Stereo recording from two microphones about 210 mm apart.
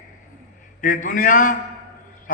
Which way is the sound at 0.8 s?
40° left (ahead or behind).